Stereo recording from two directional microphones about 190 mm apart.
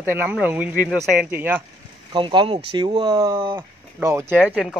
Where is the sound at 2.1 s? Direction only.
25° right (ahead or behind).